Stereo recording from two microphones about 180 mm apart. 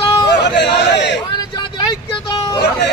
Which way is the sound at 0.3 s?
70° left (ahead or behind).